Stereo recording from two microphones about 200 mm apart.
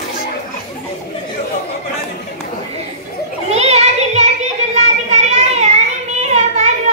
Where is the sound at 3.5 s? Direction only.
30° right (ahead or behind).